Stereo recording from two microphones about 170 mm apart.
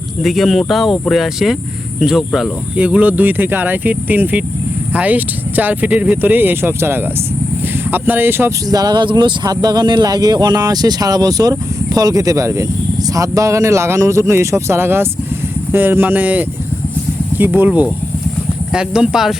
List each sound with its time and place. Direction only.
0.2 s speech: centre (ahead or behind)